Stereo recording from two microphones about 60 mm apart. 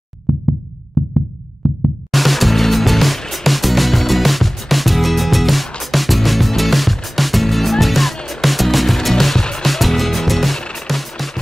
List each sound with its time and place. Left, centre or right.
0.3 s music: centre
2.1 s music: centre